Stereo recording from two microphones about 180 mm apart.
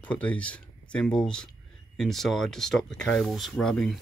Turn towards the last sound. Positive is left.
turn(degrees=5)  # may be behind; listen again after turning